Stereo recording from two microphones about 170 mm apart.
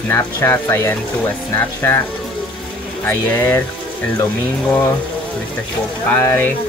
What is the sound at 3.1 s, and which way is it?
Speech, 15° left (ahead or behind).